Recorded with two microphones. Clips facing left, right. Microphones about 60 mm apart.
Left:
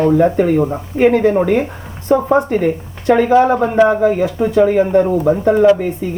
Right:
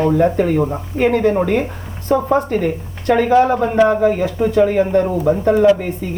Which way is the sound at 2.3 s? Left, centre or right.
Centre.